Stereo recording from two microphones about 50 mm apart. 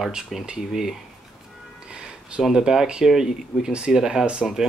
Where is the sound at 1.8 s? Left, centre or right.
Centre.